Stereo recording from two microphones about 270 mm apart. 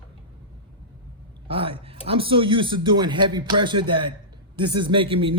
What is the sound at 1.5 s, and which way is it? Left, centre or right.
Speech, centre.